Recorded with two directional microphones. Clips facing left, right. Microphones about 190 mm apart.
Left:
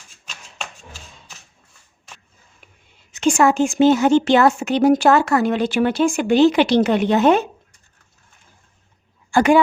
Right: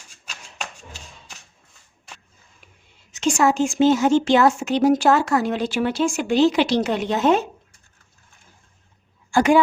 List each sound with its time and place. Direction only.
3.1 s speech: 55° left (ahead or behind)
9.3 s speech: 60° left (ahead or behind)